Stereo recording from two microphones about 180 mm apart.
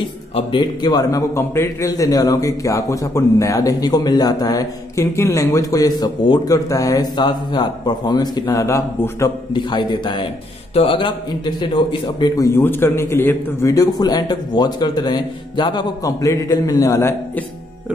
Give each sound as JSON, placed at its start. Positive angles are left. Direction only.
{"t": 0.5, "sound": "a man's voice", "side_deg": 25}